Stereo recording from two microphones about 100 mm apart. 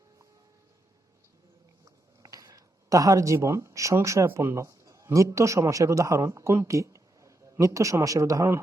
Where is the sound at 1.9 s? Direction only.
35° right (ahead or behind).